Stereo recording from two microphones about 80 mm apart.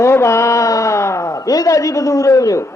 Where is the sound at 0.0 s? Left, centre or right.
Left.